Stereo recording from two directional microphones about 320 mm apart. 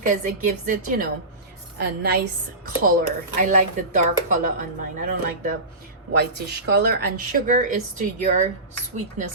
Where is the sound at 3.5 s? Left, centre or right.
Right.